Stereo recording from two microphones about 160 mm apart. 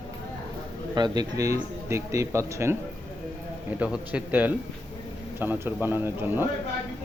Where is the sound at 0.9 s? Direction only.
25° right (ahead or behind).